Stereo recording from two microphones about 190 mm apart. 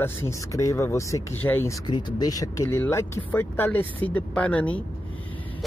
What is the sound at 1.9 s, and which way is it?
Speech, 20° left (ahead or behind).